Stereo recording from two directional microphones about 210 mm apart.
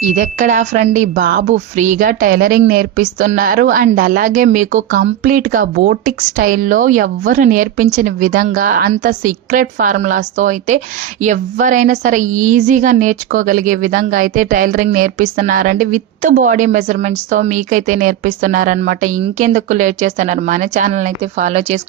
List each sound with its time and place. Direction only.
0.1 s speech: 35° right (ahead or behind)